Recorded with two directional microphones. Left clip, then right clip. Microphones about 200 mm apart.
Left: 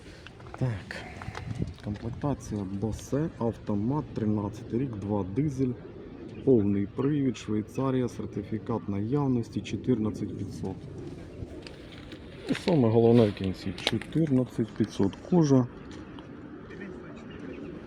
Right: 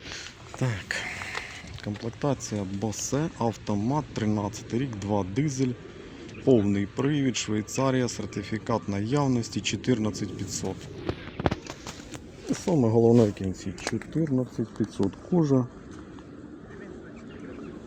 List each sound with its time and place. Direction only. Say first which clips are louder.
0.6 s a sound: right 7 dB; 5° right (ahead or behind)
2.2 s speech: right 4 dB; 15° right (ahead or behind)
12.5 s speech: even; 5° right (ahead or behind)
13.8 s speech: left 1 dB; 5° left (ahead or behind)